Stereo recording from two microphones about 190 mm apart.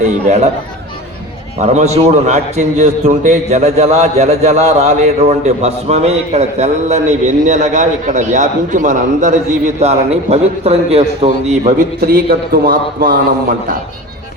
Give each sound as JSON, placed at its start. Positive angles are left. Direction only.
{"t": 1.5, "sound": "a man's voice", "side_deg": -35}